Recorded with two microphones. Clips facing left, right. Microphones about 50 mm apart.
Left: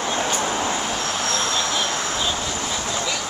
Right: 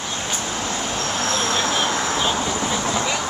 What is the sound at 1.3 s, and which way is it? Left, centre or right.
Vehicle, centre.